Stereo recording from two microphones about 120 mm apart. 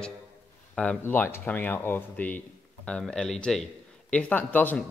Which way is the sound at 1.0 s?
20° left (ahead or behind).